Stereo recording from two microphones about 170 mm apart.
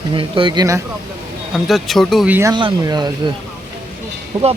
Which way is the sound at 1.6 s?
Centre (ahead or behind).